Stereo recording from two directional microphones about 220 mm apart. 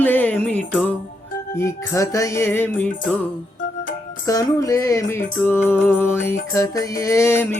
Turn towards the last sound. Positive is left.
turn(degrees=10)  # may be behind; listen again after turning